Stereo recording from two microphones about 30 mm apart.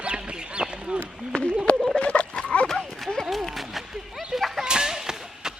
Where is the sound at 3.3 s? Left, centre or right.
Centre.